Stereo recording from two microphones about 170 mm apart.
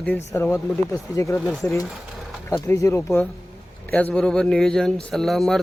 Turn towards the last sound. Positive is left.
turn(degrees=0)  # may be behind; listen again after turning